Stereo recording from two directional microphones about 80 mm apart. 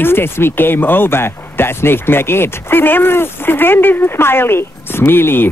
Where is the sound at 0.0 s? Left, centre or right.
Left.